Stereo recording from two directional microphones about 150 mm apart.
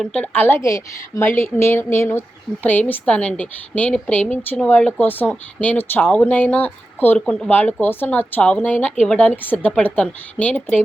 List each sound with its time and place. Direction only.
0.0 s a woman's voice: 5° left (ahead or behind)